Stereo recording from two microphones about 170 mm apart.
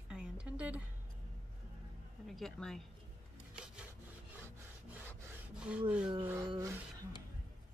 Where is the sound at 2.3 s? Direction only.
Centre (ahead or behind).